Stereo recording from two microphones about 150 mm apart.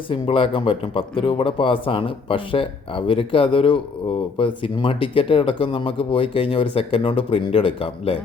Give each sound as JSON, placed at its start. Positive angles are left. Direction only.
{"t": 0.1, "sound": "speech", "side_deg": 35}